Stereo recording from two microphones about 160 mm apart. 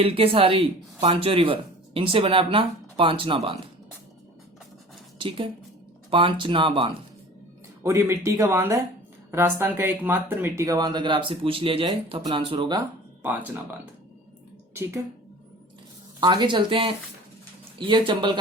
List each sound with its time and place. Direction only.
0.0 s speech: 35° right (ahead or behind)
5.1 s a woman's voice: 30° right (ahead or behind)
7.9 s speech: 15° right (ahead or behind)
14.7 s a woman's voice: 15° right (ahead or behind)
16.2 s speech: 25° right (ahead or behind)